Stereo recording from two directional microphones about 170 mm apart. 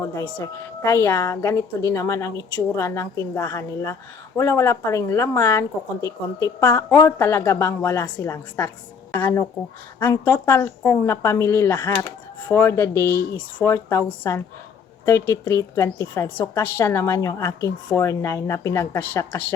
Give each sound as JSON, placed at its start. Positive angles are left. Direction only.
{"t": 0.0, "sound": "a woman's voice", "side_deg": 15}